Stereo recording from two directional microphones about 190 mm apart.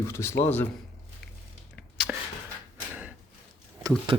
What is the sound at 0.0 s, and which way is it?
Speech, 15° left (ahead or behind).